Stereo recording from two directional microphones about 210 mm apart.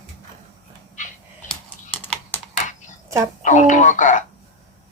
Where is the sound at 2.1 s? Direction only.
10° left (ahead or behind).